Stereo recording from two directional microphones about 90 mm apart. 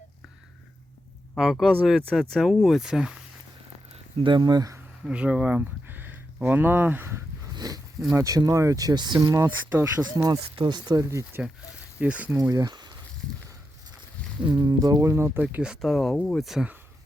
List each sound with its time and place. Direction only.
1.4 s speech: centre (ahead or behind)
3.9 s speech: 65° right (ahead or behind); by 4.7 s 50° right (ahead or behind)
5.0 s a sound: 15° right (ahead or behind)
7.5 s a sound: 45° right (ahead or behind)
8.1 s speech: 35° right (ahead or behind)
9.1 s speech: 40° right (ahead or behind)
10.5 s speech: 55° right (ahead or behind)
11.1 s speech: 35° right (ahead or behind)
11.9 s speech: 15° right (ahead or behind)
12.4 s speech: 40° right (ahead or behind)
14.4 s speech: 55° right (ahead or behind)
15.1 s speech: 25° right (ahead or behind)
15.8 s speech: 5° left (ahead or behind)